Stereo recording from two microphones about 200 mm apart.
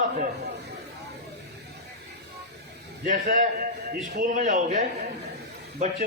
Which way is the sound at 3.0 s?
40° right (ahead or behind).